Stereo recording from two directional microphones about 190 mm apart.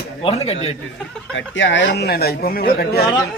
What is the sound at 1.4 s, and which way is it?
A man's voice, 75° left (ahead or behind).